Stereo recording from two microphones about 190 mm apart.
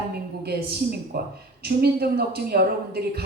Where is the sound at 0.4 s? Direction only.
55° right (ahead or behind).